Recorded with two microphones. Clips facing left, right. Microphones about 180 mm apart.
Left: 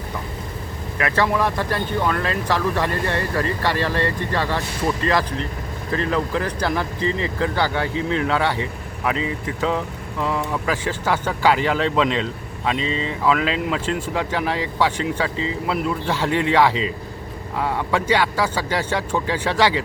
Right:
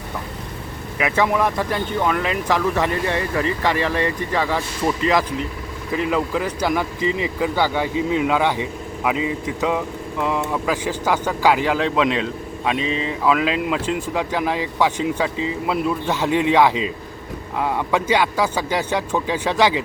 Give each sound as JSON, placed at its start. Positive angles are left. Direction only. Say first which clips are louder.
{"t": 0.9, "sound": "speech", "louder": "right 1 dB", "side_deg": -15}
{"t": 9.6, "sound": "speech", "louder": "even", "side_deg": -10}